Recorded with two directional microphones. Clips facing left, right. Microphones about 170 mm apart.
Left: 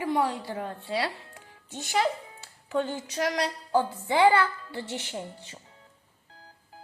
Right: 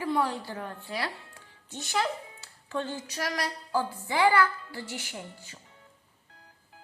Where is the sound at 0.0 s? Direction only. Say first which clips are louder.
Left 2 dB; 20° left (ahead or behind).